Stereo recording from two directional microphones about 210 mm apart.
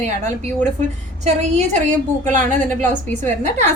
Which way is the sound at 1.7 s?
35° right (ahead or behind).